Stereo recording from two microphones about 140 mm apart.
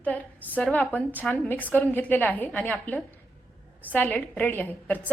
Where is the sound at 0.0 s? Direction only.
10° left (ahead or behind).